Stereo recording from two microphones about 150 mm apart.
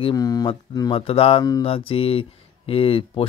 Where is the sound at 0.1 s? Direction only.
25° left (ahead or behind).